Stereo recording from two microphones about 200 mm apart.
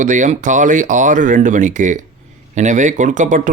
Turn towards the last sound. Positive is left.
turn(degrees=-40)  # may be behind; listen again after turning